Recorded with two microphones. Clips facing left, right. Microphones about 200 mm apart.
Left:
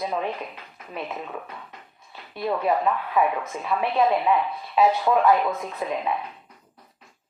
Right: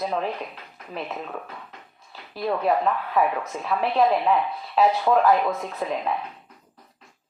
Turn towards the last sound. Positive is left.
turn(degrees=0)  # may be behind; listen again after turning